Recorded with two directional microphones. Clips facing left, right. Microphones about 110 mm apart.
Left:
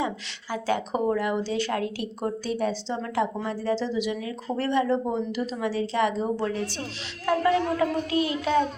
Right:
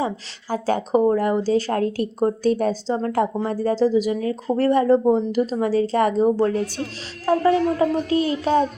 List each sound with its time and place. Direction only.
0.5 s speech: 40° right (ahead or behind)
7.3 s speech: 35° right (ahead or behind)